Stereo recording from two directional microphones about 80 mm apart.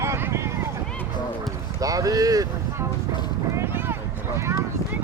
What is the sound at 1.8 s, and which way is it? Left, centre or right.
Speech, right.